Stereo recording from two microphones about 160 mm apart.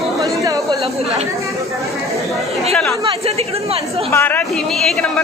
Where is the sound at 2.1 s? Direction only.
Centre (ahead or behind).